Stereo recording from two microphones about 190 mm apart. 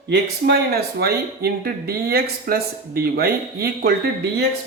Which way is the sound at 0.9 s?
55° right (ahead or behind).